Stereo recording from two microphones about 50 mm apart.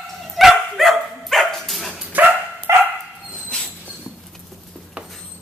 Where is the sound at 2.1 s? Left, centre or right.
Right.